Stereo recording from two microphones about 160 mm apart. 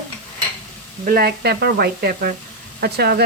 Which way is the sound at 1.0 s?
70° right (ahead or behind).